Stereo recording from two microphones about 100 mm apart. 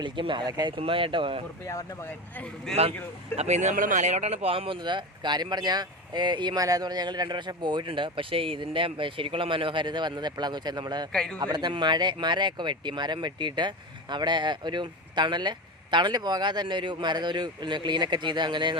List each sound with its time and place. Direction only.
0.0 s speech: 55° right (ahead or behind)
0.4 s speech: 40° right (ahead or behind)
0.8 s speech: 65° right (ahead or behind)
2.7 s speech: 5° left (ahead or behind)
4.2 s speech: 90° right; by 4.8 s 70° right (ahead or behind)
4.8 s speech: 50° right (ahead or behind)
11.1 s a man's voice: 5° left (ahead or behind)
11.3 s speech: 45° right (ahead or behind)